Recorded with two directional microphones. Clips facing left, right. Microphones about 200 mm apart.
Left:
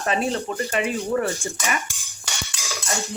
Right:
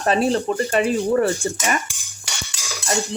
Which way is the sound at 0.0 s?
35° right (ahead or behind).